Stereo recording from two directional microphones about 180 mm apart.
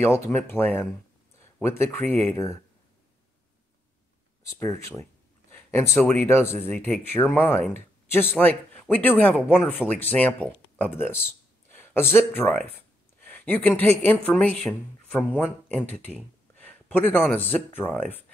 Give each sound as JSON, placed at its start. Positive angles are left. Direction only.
{"t": 0.3, "sound": "speech", "side_deg": 10}
{"t": 4.6, "sound": "speech", "side_deg": 15}
{"t": 11.7, "sound": "a sound", "side_deg": 10}
{"t": 14.0, "sound": "speech", "side_deg": 5}